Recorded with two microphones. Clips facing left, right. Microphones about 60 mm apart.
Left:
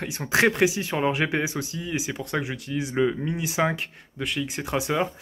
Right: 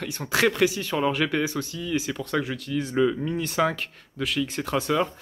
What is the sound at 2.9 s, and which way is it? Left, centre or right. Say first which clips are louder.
Speech: right 1 dB; left.